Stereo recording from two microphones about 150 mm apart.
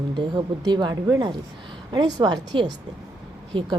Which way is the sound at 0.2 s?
30° right (ahead or behind).